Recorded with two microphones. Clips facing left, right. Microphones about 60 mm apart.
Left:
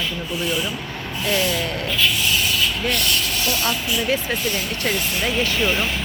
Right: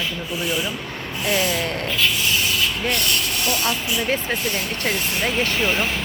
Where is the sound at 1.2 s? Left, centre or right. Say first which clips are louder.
Even; right.